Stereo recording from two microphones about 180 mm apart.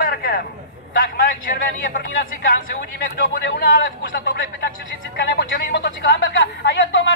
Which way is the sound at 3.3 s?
80° left.